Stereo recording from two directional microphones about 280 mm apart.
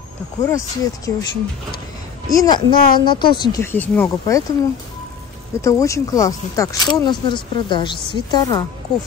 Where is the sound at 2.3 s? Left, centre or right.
Centre.